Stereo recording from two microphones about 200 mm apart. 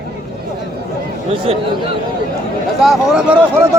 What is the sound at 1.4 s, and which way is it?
Speech, 25° right (ahead or behind).